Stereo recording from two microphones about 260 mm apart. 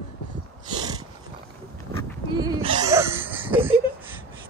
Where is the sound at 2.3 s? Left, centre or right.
Centre.